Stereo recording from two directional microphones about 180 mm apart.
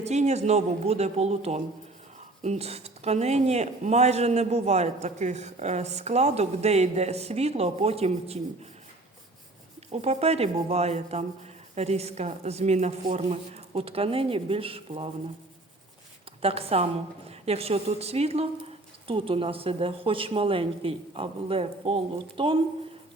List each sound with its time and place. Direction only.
0.0 s speech: 40° right (ahead or behind)
9.9 s speech: 35° right (ahead or behind)
16.4 s speech: 35° right (ahead or behind)